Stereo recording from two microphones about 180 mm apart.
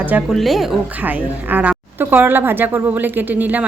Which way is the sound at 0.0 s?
10° right (ahead or behind).